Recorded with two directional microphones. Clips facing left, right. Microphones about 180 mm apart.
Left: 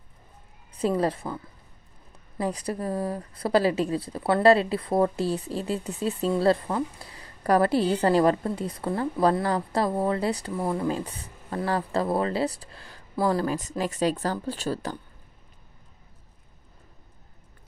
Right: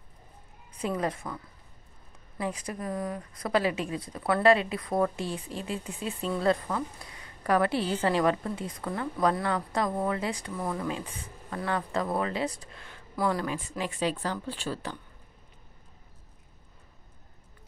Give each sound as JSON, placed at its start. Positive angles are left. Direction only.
{"t": 0.7, "sound": "speech", "side_deg": 30}
{"t": 2.4, "sound": "speech", "side_deg": 35}